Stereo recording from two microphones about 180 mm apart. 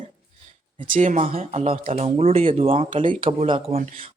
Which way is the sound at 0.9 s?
45° right (ahead or behind).